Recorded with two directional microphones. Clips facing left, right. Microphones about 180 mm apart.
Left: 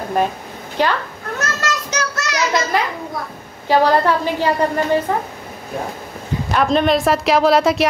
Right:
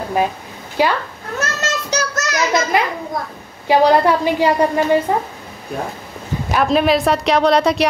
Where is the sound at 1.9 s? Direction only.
35° right (ahead or behind).